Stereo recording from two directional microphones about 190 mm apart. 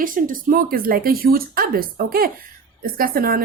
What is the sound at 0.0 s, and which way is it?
Speech, 45° right (ahead or behind).